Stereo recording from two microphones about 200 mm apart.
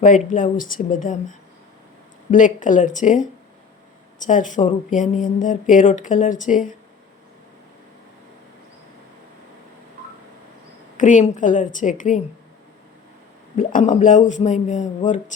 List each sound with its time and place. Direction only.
0.0 s a man's voice: 40° left (ahead or behind)
5.8 s speech: 25° left (ahead or behind)
6.1 s a man's voice: 40° left (ahead or behind)
10.9 s a man's voice: 40° left (ahead or behind)
13.6 s a man's voice: 40° left (ahead or behind)